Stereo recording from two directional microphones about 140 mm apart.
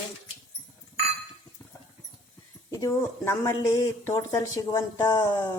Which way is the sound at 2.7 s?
20° left (ahead or behind).